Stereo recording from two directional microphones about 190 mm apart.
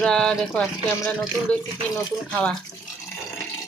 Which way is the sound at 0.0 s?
5° left (ahead or behind).